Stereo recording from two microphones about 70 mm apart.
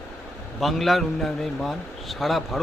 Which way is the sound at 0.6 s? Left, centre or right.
Centre.